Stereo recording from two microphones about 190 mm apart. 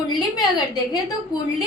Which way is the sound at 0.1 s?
20° left (ahead or behind).